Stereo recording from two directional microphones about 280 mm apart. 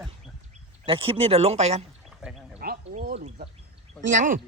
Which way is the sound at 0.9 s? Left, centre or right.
Centre.